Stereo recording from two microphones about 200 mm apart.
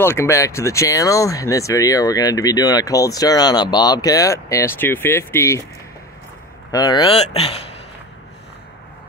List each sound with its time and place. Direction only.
0.0 s speech: 10° left (ahead or behind)
6.7 s speech: 20° left (ahead or behind)